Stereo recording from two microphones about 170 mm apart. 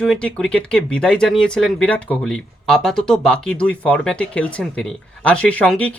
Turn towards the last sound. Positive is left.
turn(degrees=10)  # may be behind; listen again after turning